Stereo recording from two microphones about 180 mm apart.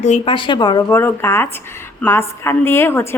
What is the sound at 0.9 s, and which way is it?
A woman's voice, 15° left (ahead or behind).